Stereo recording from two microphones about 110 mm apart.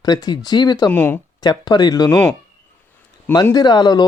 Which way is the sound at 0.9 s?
20° left (ahead or behind).